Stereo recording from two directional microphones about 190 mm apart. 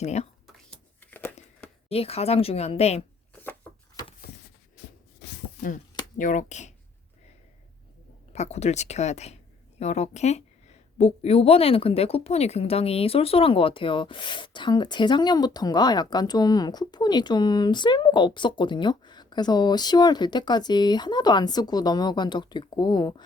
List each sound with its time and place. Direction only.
0.0 s speech: 35° left (ahead or behind)
0.4 s a sound: 5° left (ahead or behind)
1.9 s speech: 30° left (ahead or behind)
6.1 s speech: 40° left (ahead or behind)
8.3 s a woman's voice: 35° left (ahead or behind)